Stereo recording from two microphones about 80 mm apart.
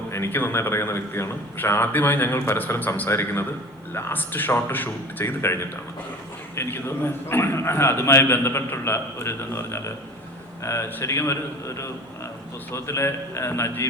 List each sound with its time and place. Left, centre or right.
0.1 s a man's voice: left
6.6 s a man's voice: left